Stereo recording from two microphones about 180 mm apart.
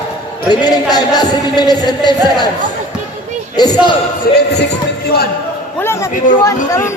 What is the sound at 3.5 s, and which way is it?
Speech, 20° left (ahead or behind).